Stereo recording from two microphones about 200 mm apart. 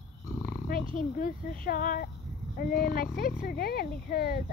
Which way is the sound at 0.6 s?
45° left (ahead or behind).